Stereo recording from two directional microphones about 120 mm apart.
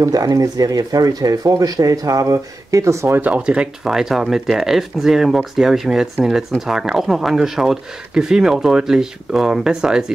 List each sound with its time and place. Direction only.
0.0 s speech: 30° right (ahead or behind); by 10.1 s 5° right (ahead or behind)